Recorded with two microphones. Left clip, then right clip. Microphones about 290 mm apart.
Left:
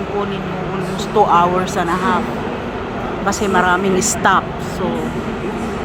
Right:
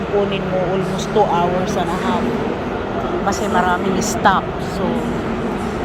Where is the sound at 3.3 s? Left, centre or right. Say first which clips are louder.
Left 3 dB; centre.